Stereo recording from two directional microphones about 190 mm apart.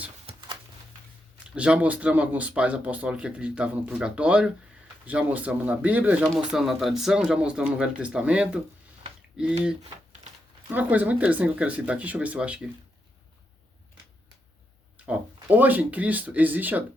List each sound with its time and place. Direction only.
0.3 s a sound: 30° right (ahead or behind)
1.5 s speech: 5° right (ahead or behind)
10.7 s speech: 10° right (ahead or behind)
14.9 s speech: 10° right (ahead or behind)